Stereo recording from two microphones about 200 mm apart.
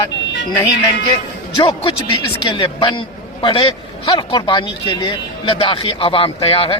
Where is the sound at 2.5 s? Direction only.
25° left (ahead or behind).